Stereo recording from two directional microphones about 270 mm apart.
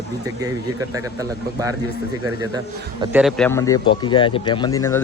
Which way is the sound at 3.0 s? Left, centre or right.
Centre.